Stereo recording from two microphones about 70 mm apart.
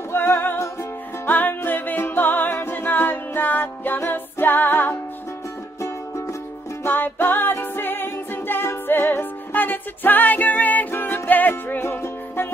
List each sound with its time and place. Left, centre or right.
0.1 s music: left
5.8 s music: left
6.8 s music: left
11.8 s music: left